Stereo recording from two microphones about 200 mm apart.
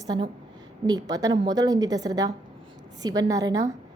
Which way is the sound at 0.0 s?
20° right (ahead or behind).